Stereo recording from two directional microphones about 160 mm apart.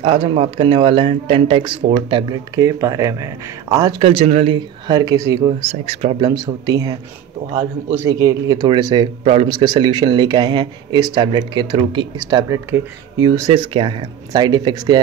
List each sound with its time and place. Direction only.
0.0 s speech: 35° right (ahead or behind)
4.0 s speech: 40° right (ahead or behind)
4.8 s speech: 25° right (ahead or behind)
5.6 s speech: 40° right (ahead or behind)
6.2 s speech: 25° right (ahead or behind)
8.2 s speech: 20° right (ahead or behind)
13.5 s speech: 35° right (ahead or behind)